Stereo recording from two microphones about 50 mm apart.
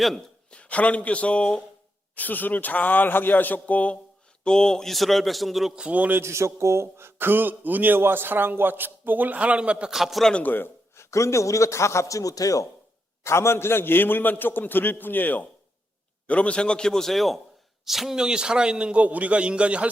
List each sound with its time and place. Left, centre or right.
0.5 s speech: left
2.1 s speech: left
4.4 s a man's voice: centre
5.9 s a man's voice: right
6.2 s speech: right
9.9 s a man's voice: centre
10.4 s speech: left
10.9 s a man's voice: left
13.2 s a man's voice: left
16.2 s a man's voice: left; by 18.2 s centre
18.2 s a man's voice: centre